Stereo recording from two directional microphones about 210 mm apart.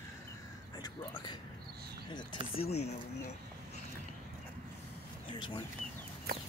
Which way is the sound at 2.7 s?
30° left (ahead or behind).